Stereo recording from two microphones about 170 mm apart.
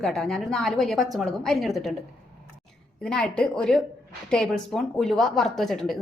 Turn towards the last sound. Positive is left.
turn(degrees=0)  # may be behind; listen again after turning